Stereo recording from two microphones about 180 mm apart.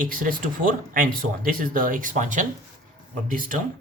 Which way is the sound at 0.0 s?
50° right (ahead or behind).